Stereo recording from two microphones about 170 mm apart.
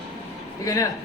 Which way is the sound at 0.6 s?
20° left (ahead or behind).